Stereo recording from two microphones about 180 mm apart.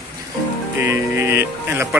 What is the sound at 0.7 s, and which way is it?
A man's voice, 15° right (ahead or behind).